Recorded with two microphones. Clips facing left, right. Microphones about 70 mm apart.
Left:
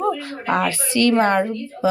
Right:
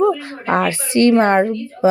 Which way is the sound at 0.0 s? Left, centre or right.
Right.